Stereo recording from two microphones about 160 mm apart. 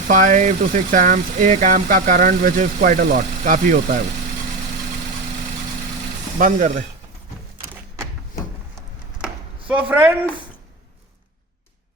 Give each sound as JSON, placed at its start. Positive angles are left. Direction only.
{"t": 0.1, "sound": "speech", "side_deg": -55}
{"t": 6.4, "sound": "speech", "side_deg": -55}
{"t": 9.2, "sound": "chop", "side_deg": -5}